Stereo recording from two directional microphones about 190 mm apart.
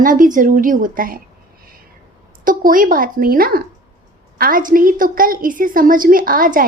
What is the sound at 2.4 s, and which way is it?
A woman's voice, 45° right (ahead or behind).